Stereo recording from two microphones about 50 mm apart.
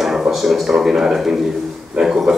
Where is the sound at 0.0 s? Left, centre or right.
Centre.